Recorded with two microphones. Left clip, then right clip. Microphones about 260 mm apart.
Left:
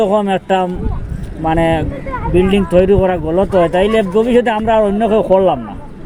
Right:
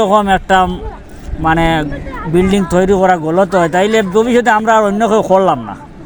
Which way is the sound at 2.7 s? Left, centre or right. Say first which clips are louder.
Right 1 dB; right.